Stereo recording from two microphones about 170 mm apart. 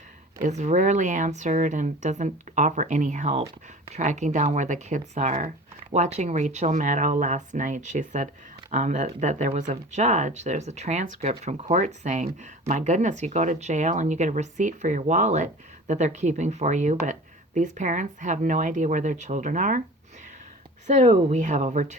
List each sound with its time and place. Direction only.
0.4 s speech: 45° right (ahead or behind)
20.8 s speech: 45° right (ahead or behind)